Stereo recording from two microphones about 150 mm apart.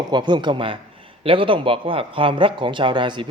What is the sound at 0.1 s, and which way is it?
Speech, 30° right (ahead or behind).